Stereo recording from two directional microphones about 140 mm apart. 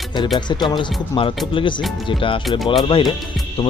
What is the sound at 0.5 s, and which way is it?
Speech, 35° left (ahead or behind).